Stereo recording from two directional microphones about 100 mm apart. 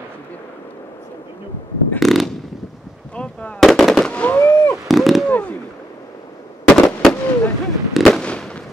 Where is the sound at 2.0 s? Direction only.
Centre (ahead or behind).